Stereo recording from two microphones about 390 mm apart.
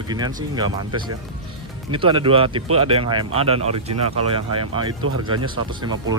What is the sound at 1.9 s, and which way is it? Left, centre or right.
Speech, centre.